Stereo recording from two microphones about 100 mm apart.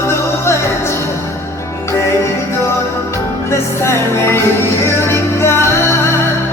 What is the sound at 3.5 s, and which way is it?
Music, 25° left (ahead or behind).